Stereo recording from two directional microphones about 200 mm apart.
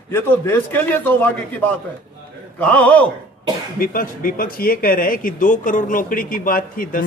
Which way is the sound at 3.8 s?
45° left (ahead or behind).